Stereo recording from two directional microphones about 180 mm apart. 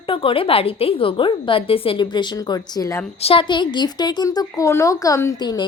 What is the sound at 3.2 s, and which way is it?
A woman's voice, 30° left (ahead or behind).